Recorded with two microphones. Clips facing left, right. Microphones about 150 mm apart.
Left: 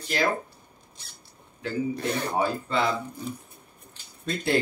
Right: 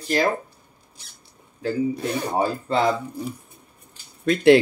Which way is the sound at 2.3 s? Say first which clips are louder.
Right 5 dB; 40° right (ahead or behind).